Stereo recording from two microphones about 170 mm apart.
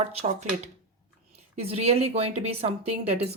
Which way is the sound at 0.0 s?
40° right (ahead or behind).